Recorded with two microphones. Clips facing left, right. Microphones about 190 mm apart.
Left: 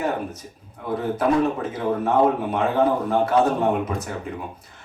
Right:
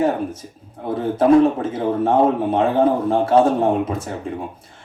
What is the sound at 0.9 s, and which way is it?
A man's voice, 30° right (ahead or behind).